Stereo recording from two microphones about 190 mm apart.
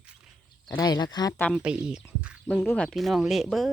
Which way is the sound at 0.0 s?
5° right (ahead or behind).